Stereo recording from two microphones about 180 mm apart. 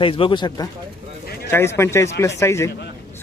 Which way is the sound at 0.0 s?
30° left (ahead or behind).